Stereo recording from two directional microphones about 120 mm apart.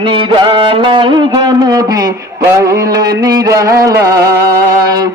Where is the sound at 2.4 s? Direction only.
25° right (ahead or behind).